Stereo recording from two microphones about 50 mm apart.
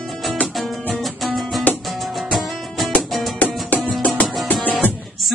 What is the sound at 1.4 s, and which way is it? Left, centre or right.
Music, centre.